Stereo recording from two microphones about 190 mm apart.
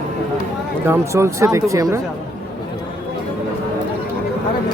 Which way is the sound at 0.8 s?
15° right (ahead or behind).